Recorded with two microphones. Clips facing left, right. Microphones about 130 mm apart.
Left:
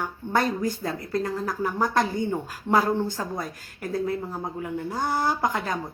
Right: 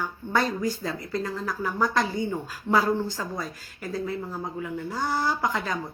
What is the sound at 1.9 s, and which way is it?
Speech, 50° left (ahead or behind).